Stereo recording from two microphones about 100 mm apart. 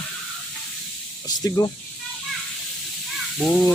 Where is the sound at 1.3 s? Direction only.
35° left (ahead or behind).